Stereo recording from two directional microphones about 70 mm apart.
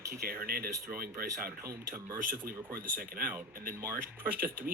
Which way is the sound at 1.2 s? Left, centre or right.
Right.